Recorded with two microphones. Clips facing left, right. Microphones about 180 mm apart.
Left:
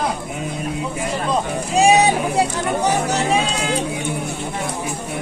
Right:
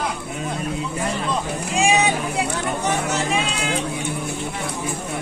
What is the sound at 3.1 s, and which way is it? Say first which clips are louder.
Music: left 4 dB; 35° left (ahead or behind).